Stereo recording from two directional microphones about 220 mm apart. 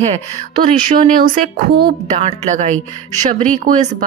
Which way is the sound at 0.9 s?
40° right (ahead or behind).